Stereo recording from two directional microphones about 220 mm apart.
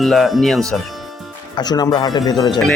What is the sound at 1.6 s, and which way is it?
Speech, 20° left (ahead or behind).